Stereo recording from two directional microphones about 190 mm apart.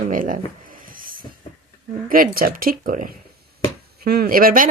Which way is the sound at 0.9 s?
50° right (ahead or behind).